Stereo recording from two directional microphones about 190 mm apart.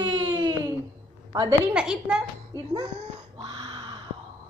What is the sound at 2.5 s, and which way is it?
Speech, 20° right (ahead or behind).